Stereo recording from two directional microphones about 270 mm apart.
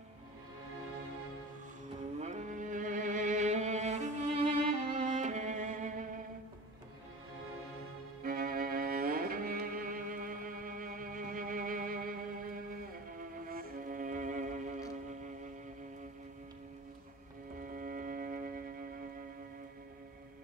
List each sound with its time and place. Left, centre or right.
2.1 s music: right
8.2 s music: right
17.6 s music: right